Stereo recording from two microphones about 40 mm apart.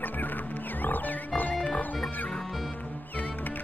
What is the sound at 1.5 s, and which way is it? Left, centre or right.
Music, left.